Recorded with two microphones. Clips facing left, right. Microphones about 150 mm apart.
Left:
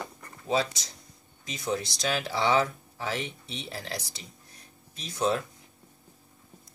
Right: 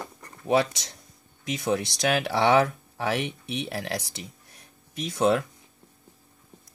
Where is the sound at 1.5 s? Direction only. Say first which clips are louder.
Right 5 dB; 75° right (ahead or behind).